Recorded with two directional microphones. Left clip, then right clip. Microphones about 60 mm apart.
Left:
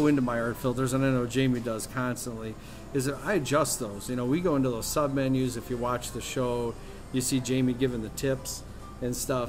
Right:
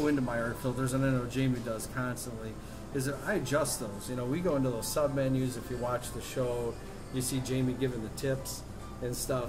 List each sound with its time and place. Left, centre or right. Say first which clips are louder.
0.3 s speech: left 4 dB; left